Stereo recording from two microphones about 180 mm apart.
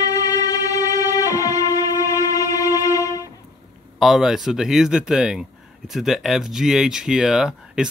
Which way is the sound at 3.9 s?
Centre (ahead or behind).